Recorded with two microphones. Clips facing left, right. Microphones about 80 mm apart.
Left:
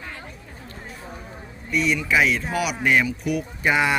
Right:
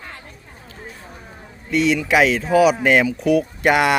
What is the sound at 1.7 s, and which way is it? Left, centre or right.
Speech, right.